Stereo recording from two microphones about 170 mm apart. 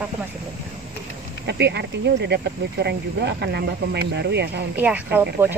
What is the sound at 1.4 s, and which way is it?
Speech, 85° right.